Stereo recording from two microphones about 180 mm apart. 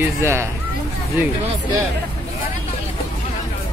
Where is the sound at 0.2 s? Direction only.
15° right (ahead or behind).